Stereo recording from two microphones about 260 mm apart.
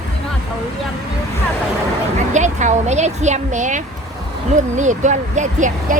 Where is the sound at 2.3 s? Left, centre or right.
Right.